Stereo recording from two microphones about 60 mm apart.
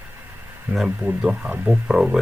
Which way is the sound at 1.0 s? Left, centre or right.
Centre.